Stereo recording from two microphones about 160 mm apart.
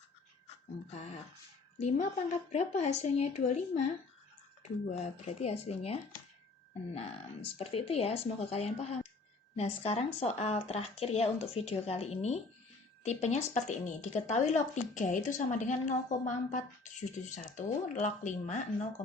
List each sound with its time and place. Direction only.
0.9 s a woman's voice: 45° left (ahead or behind)
7.6 s a woman's voice: 35° left (ahead or behind)